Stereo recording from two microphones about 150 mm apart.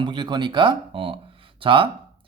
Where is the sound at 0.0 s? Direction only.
30° right (ahead or behind).